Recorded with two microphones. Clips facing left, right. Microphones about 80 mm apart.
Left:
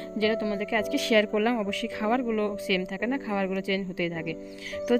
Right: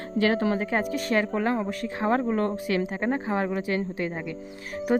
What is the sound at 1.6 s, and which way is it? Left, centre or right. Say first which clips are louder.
A woman's voice: right 1 dB; right.